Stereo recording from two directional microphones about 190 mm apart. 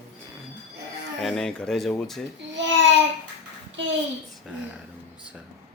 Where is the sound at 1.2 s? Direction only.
Centre (ahead or behind).